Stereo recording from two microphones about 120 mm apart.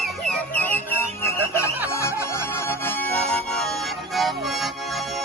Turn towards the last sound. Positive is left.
turn(degrees=0)  # may be behind; listen again after turning